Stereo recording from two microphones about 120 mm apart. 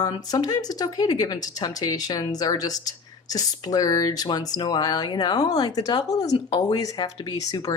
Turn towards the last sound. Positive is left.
turn(degrees=30)  # may be behind; listen again after turning